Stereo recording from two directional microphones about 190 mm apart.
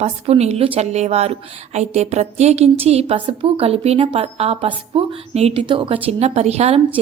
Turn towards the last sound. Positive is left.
turn(degrees=-35)  # may be behind; listen again after turning